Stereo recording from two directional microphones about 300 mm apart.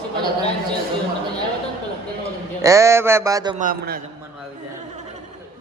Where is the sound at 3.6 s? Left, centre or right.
Right.